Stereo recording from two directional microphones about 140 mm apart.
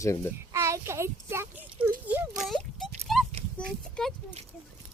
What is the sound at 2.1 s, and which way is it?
Oink, centre (ahead or behind).